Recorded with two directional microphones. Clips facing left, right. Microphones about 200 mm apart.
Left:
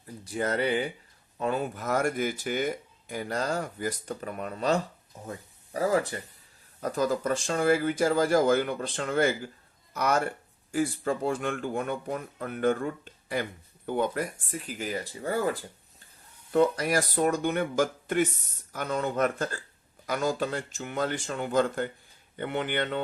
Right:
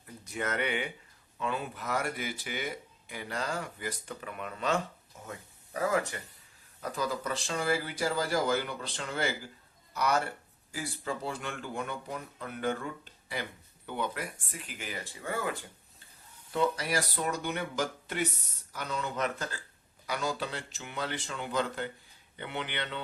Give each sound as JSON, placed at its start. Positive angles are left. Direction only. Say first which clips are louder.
{"t": 0.3, "sound": "speech", "louder": "left 5 dB", "side_deg": 35}
{"t": 1.4, "sound": "speech", "louder": "left 6 dB", "side_deg": 45}
{"t": 6.8, "sound": "speech", "louder": "left 7 dB", "side_deg": 45}
{"t": 16.5, "sound": "speech", "louder": "left 6 dB", "side_deg": 50}